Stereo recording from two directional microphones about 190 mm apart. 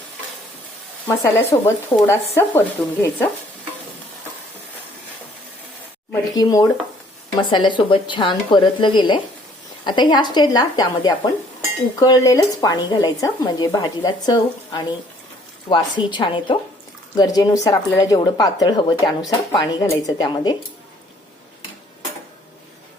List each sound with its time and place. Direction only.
1.0 s speech: 10° left (ahead or behind)
6.1 s speech: 20° left (ahead or behind)